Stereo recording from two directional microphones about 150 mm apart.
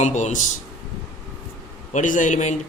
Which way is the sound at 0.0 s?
50° left (ahead or behind).